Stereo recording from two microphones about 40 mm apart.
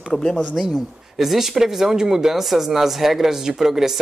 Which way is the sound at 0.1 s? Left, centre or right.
Centre.